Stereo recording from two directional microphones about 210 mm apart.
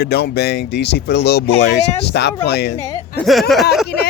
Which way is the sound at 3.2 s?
Centre (ahead or behind).